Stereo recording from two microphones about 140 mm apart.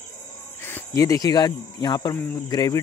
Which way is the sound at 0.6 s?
15° left (ahead or behind).